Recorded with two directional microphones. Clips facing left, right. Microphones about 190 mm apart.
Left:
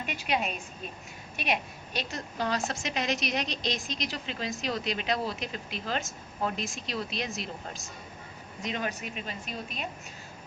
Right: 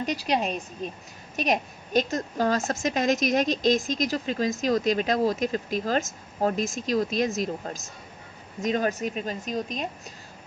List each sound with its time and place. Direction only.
0.0 s a woman's voice: 40° right (ahead or behind)